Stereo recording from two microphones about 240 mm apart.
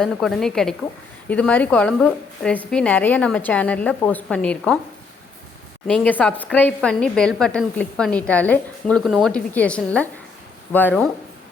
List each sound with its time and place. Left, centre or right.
0.0 s a woman's voice: centre
5.9 s a woman's voice: centre